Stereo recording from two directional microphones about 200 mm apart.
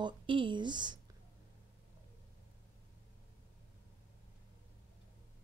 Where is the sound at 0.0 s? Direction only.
25° right (ahead or behind).